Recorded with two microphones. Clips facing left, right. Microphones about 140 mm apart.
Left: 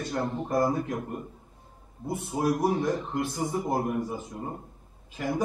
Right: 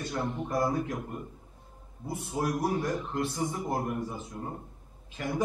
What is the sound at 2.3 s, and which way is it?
A man's voice, 10° left (ahead or behind).